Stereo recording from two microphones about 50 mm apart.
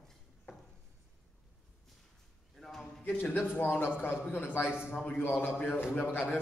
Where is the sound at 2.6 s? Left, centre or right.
Centre.